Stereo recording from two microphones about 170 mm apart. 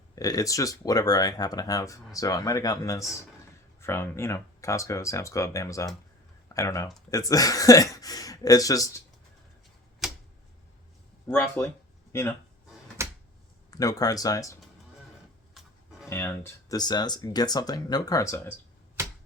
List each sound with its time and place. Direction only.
0.2 s speech: 20° left (ahead or behind)
10.0 s typewriter: 5° right (ahead or behind)
11.3 s speech: 10° left (ahead or behind)
13.0 s a sound: 15° right (ahead or behind)
13.7 s speech: 20° left (ahead or behind)
15.6 s music: centre (ahead or behind)
16.0 s speech: 15° left (ahead or behind)